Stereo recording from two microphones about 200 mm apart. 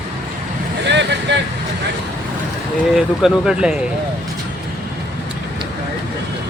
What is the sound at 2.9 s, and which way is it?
Speech, centre (ahead or behind).